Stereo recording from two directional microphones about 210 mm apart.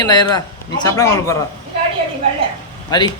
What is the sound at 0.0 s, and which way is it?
Speech, 20° left (ahead or behind).